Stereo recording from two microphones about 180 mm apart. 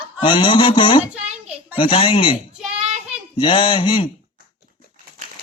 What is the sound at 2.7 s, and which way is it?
Child singing, 35° right (ahead or behind).